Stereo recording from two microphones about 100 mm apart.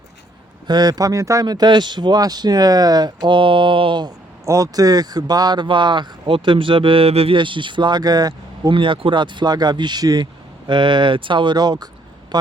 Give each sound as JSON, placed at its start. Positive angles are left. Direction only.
{"t": 0.7, "sound": "speech", "side_deg": -40}
{"t": 4.4, "sound": "speech", "side_deg": -35}
{"t": 7.3, "sound": "speech", "side_deg": -55}
{"t": 8.7, "sound": "speech", "side_deg": -60}
{"t": 10.7, "sound": "speech", "side_deg": -55}